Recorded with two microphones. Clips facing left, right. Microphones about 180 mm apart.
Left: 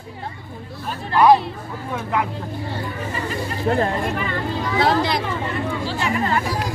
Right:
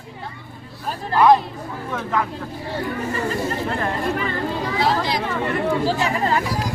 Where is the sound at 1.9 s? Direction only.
10° left (ahead or behind).